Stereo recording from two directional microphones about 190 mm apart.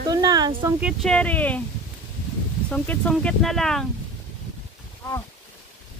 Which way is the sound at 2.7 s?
5° left (ahead or behind).